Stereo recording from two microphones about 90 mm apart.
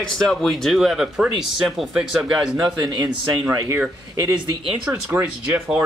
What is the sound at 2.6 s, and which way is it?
Speech, 45° right (ahead or behind).